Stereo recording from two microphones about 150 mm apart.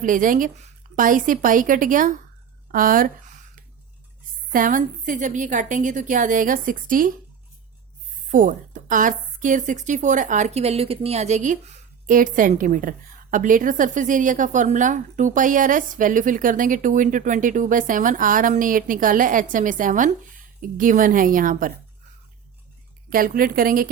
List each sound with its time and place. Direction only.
0.0 s a woman's voice: 60° right (ahead or behind)
4.5 s a woman's voice: 60° right (ahead or behind)
8.3 s a woman's voice: 60° right (ahead or behind)
23.0 s a woman's voice: 70° right (ahead or behind)